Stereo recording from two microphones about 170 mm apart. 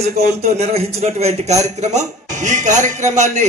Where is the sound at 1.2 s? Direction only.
40° right (ahead or behind).